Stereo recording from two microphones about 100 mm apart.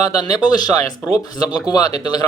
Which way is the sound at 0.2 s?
40° left (ahead or behind).